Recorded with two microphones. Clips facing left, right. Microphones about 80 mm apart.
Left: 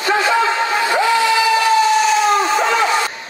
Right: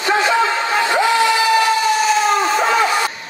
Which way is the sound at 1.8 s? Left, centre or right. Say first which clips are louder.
Left 2 dB; centre.